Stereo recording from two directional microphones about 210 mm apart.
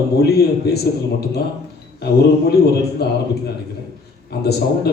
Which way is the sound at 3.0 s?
50° left (ahead or behind).